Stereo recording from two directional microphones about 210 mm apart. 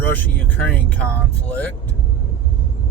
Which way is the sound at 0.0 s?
10° left (ahead or behind).